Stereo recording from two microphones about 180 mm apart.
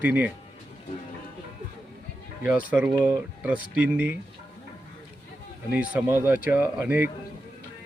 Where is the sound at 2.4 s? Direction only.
10° right (ahead or behind).